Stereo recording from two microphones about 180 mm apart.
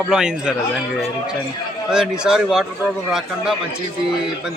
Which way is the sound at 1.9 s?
5° right (ahead or behind).